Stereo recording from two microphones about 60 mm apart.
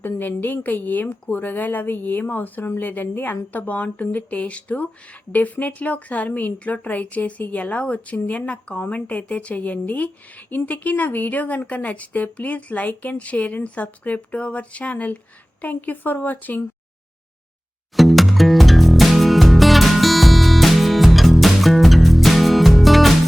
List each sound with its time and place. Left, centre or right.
0.0 s a woman's voice: left
17.9 s music: centre